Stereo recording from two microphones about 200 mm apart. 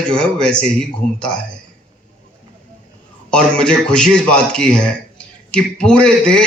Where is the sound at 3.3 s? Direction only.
5° left (ahead or behind).